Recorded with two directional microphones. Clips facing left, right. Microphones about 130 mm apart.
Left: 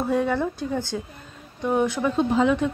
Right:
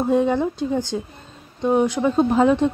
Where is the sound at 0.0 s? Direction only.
20° right (ahead or behind).